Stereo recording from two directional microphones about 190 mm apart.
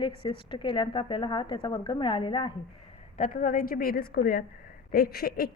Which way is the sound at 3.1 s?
40° left (ahead or behind).